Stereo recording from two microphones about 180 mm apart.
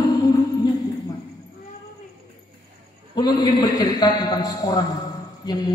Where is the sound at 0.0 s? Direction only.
20° left (ahead or behind).